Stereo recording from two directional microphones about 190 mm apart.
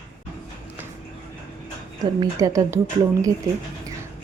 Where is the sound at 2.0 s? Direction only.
20° right (ahead or behind).